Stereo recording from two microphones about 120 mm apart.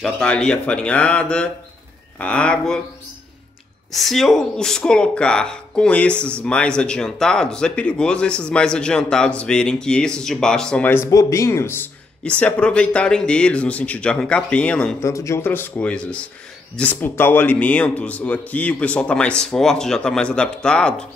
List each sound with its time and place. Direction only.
0.0 s speech: 5° left (ahead or behind)
3.9 s speech: centre (ahead or behind)
11.1 s speech: 30° left (ahead or behind); by 15.0 s 10° left (ahead or behind)
15.0 s speech: 25° left (ahead or behind); by 21.1 s 5° left (ahead or behind)